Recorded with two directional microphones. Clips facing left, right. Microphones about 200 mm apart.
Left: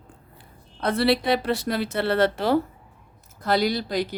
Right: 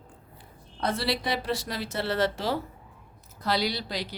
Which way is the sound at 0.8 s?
60° left (ahead or behind).